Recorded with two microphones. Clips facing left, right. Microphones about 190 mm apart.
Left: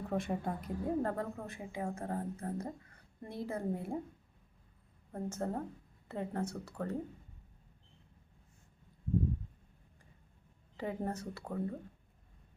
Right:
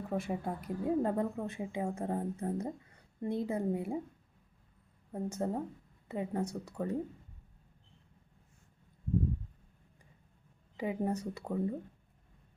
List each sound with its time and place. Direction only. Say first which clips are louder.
0.1 s speech: even; 5° right (ahead or behind)
5.1 s speech: right 3 dB; 15° right (ahead or behind)
10.8 s speech: right 4 dB; 15° right (ahead or behind)